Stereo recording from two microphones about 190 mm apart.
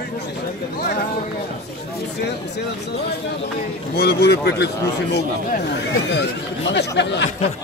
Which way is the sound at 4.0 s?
55° left (ahead or behind).